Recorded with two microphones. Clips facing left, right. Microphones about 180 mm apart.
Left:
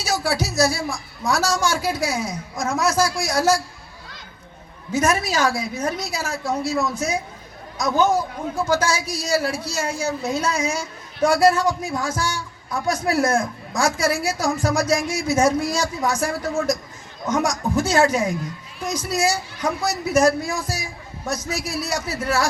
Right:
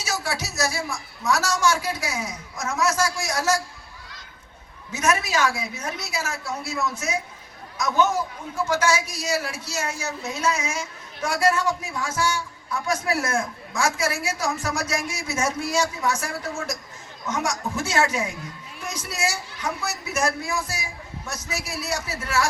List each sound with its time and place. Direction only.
0.0 s a man's voice: 35° left (ahead or behind)
4.9 s a man's voice: 30° left (ahead or behind)